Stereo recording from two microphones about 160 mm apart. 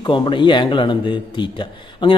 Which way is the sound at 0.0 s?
30° left (ahead or behind).